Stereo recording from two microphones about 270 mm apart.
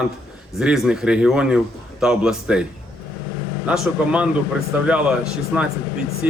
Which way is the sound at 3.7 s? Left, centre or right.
Centre.